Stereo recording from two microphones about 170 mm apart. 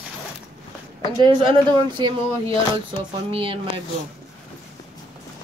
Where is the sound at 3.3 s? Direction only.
30° right (ahead or behind).